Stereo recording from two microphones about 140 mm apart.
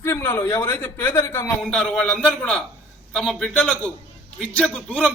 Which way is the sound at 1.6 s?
5° left (ahead or behind).